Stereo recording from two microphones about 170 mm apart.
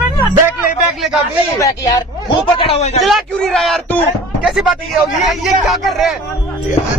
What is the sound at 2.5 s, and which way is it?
Speech, 35° left (ahead or behind).